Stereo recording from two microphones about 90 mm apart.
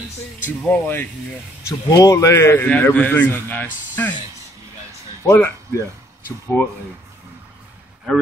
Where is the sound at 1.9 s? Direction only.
40° left (ahead or behind).